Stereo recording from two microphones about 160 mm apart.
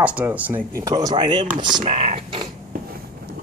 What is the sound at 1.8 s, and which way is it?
Speech, 45° right (ahead or behind).